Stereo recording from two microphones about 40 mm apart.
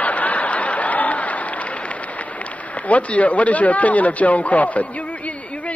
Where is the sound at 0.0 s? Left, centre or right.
Left.